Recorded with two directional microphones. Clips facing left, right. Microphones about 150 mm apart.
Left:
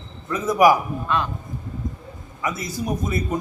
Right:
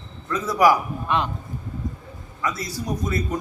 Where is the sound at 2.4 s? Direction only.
20° left (ahead or behind).